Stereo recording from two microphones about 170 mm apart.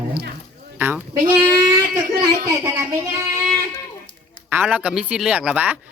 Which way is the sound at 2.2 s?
20° right (ahead or behind).